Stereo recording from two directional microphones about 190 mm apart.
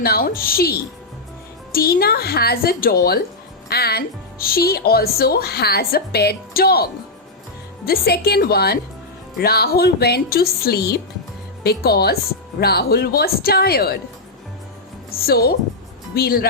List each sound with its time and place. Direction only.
0.0 s speech: 50° left (ahead or behind)
7.9 s speech: 55° left (ahead or behind)
15.1 s speech: 55° left (ahead or behind)